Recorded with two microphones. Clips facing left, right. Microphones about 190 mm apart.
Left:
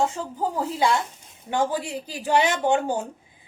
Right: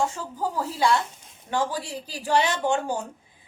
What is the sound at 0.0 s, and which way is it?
A woman's voice, 20° left (ahead or behind).